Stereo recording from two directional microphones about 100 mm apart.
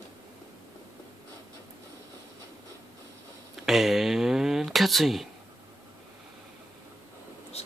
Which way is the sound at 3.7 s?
5° right (ahead or behind).